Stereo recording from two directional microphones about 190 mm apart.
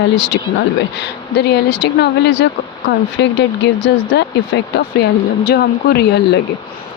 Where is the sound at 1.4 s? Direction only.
60° left (ahead or behind).